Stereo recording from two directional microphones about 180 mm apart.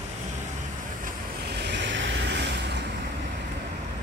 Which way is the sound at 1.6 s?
80° right.